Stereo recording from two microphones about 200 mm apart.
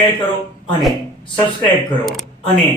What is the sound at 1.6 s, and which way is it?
Speech, centre (ahead or behind).